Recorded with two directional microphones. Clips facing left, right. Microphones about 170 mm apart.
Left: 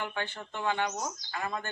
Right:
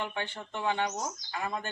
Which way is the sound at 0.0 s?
20° right (ahead or behind).